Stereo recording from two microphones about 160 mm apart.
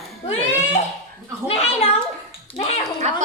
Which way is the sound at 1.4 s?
40° left (ahead or behind).